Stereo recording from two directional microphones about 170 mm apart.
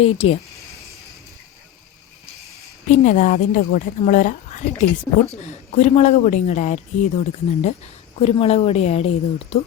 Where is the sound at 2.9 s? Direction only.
45° left (ahead or behind).